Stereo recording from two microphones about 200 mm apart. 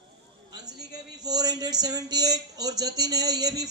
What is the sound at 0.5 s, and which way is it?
A man's voice, 20° right (ahead or behind).